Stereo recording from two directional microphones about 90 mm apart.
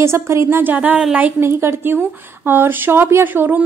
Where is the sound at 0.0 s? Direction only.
30° right (ahead or behind).